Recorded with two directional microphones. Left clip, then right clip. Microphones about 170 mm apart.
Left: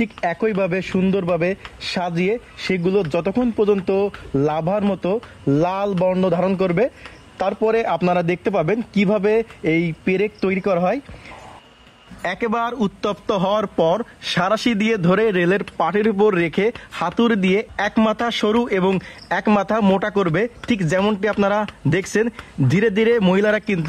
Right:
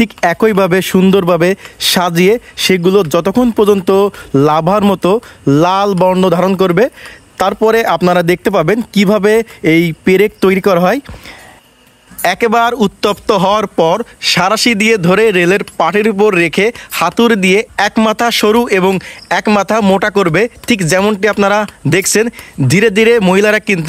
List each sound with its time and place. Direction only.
0.0 s speech: 60° right (ahead or behind)
12.2 s speech: 35° right (ahead or behind)